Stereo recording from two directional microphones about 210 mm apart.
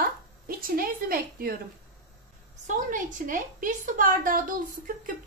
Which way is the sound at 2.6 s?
35° right (ahead or behind).